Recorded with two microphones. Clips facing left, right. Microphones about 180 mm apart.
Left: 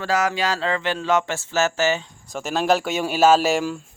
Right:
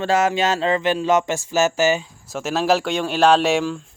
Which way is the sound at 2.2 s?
Centre (ahead or behind).